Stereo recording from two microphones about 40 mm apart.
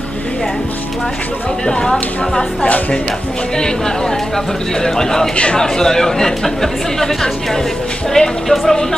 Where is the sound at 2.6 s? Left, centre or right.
Left.